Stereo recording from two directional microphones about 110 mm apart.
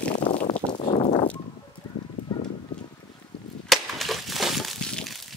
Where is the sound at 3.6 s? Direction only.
Centre (ahead or behind).